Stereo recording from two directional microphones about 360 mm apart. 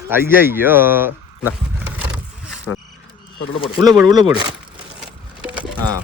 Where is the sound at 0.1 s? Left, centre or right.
Centre.